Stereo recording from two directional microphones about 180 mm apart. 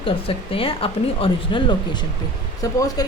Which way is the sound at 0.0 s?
30° left (ahead or behind).